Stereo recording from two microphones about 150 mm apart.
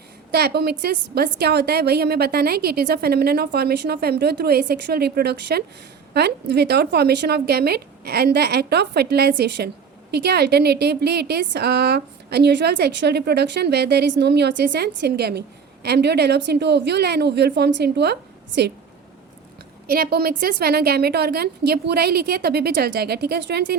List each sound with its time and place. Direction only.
0.3 s a woman's voice: 90° right
19.9 s a woman's voice: 90° right